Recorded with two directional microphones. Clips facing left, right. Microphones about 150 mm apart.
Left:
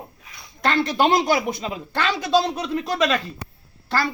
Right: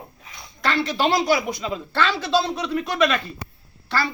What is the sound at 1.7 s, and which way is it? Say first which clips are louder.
Speech: right 4 dB; 15° left (ahead or behind).